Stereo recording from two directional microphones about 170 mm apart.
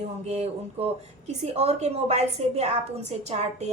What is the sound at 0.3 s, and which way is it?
A woman's voice, 40° right (ahead or behind).